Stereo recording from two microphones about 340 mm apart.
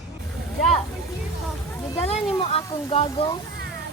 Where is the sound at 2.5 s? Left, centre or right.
Centre.